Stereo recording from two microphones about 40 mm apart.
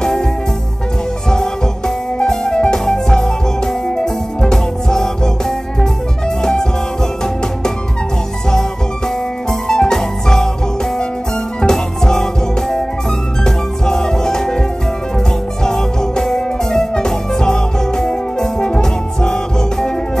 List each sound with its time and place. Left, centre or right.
0.0 s music: centre
2.2 s music: centre
9.5 s music: centre
11.6 s music: centre
15.6 s music: centre